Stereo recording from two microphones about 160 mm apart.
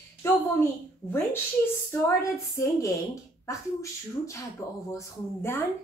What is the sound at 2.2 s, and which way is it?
A woman's voice, 20° left (ahead or behind).